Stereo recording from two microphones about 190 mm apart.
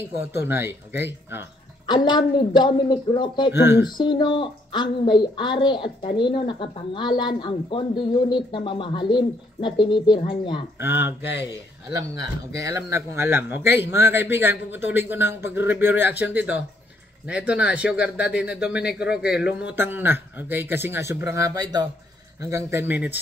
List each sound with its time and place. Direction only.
0.0 s speech: 10° right (ahead or behind)
1.9 s speech: 25° left (ahead or behind)
10.8 s speech: 10° right (ahead or behind)
12.6 s a man's voice: 15° right (ahead or behind)